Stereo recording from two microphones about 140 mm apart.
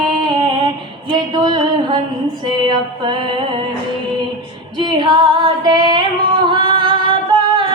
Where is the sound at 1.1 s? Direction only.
30° right (ahead or behind).